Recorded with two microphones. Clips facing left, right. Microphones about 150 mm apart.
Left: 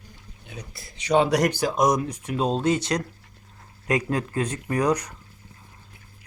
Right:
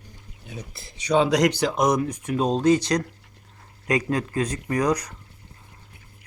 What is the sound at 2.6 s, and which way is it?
Speech, 35° right (ahead or behind).